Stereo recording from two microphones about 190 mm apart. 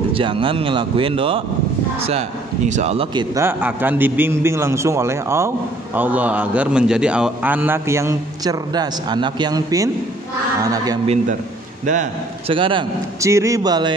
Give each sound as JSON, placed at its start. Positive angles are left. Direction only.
{"t": 0.1, "sound": "a man's voice", "side_deg": -25}
{"t": 3.3, "sound": "a man's voice", "side_deg": -10}
{"t": 11.8, "sound": "speech", "side_deg": -40}
{"t": 12.5, "sound": "speech", "side_deg": -25}